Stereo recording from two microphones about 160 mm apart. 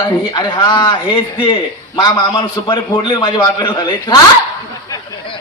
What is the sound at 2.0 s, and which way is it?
A man's voice, 30° left (ahead or behind).